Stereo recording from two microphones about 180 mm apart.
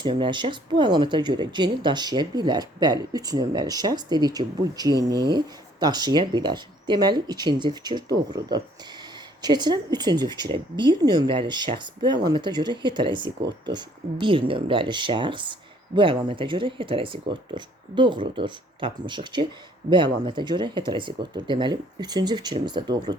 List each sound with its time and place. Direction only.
0.0 s speech: 25° right (ahead or behind)